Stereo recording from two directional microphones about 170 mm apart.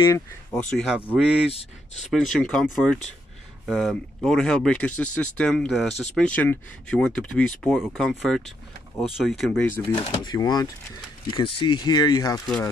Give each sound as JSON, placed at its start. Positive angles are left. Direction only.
{"t": 0.0, "sound": "speech", "side_deg": 15}
{"t": 0.7, "sound": "speech", "side_deg": -5}
{"t": 1.5, "sound": "speech", "side_deg": 35}
{"t": 2.3, "sound": "speech", "side_deg": 0}
{"t": 9.9, "sound": "speech", "side_deg": 25}